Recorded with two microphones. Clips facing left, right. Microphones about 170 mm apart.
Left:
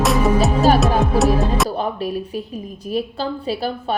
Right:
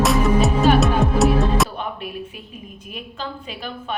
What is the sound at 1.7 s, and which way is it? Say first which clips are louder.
A woman's voice: left 7 dB; 35° left (ahead or behind).